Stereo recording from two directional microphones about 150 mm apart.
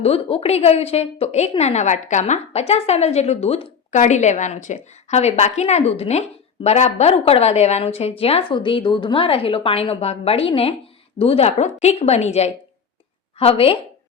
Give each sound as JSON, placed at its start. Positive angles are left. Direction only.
{"t": 0.0, "sound": "a woman's voice", "side_deg": 40}